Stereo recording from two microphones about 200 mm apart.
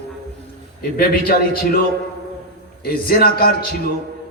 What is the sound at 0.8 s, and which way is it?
Speech, 45° left (ahead or behind).